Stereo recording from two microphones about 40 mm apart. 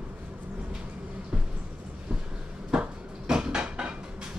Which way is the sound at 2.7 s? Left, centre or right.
Right.